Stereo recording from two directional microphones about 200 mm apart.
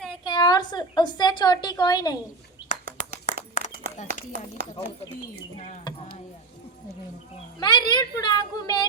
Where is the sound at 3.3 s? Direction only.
35° left (ahead or behind).